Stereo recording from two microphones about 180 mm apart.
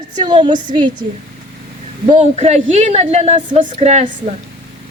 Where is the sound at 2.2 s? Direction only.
35° right (ahead or behind).